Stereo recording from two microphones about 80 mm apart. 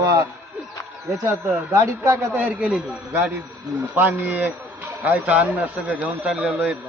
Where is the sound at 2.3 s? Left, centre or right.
Right.